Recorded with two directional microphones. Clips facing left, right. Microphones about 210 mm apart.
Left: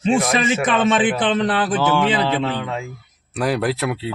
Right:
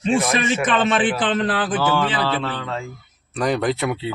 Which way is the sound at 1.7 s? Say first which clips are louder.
Left 3 dB; 15° left (ahead or behind).